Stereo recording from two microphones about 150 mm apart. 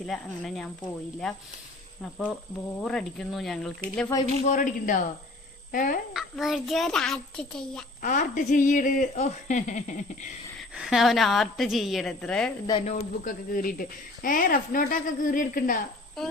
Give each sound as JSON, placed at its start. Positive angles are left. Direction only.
{"t": 0.0, "sound": "a woman's voice", "side_deg": 0}
{"t": 2.8, "sound": "a woman's voice", "side_deg": 5}
{"t": 4.4, "sound": "speech", "side_deg": 60}
{"t": 6.1, "sound": "a woman's voice", "side_deg": 0}
{"t": 8.0, "sound": "speech", "side_deg": 60}
{"t": 10.6, "sound": "a woman's voice", "side_deg": 0}
{"t": 12.8, "sound": "speech", "side_deg": 60}
{"t": 16.2, "sound": "a woman's voice", "side_deg": 5}